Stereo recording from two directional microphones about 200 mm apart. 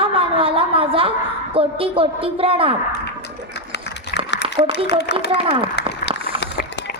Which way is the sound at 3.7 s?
60° left (ahead or behind).